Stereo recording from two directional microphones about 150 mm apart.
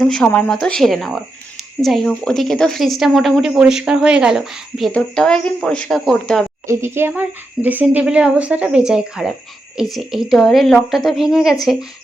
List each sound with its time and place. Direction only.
0.0 s a woman's voice: 5° left (ahead or behind)
6.7 s a woman's voice: 15° right (ahead or behind)